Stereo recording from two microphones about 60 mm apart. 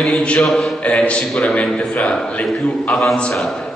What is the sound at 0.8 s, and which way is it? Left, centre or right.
A man's voice, centre.